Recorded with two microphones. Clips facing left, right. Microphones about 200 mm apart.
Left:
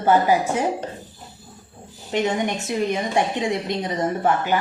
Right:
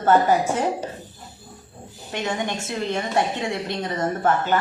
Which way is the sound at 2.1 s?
15° left (ahead or behind).